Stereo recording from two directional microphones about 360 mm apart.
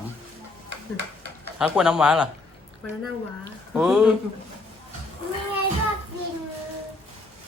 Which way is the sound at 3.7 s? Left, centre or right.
Centre.